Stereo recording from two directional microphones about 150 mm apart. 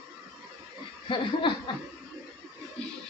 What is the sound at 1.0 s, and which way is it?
Chuckle, 35° left (ahead or behind).